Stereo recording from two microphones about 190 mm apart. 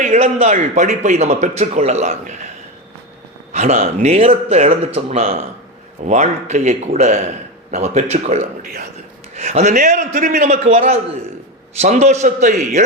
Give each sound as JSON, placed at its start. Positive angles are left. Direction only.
{"t": 0.0, "sound": "a man's voice", "side_deg": -35}
{"t": 3.5, "sound": "a man's voice", "side_deg": -35}